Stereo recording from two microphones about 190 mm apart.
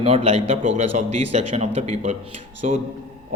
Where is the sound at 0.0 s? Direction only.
30° right (ahead or behind).